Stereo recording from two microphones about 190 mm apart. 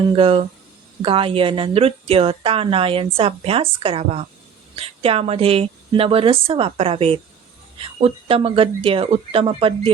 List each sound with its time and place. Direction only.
0.2 s a woman's voice: 30° right (ahead or behind)